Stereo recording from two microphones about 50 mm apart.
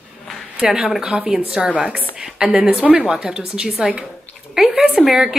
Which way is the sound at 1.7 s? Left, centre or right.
Right.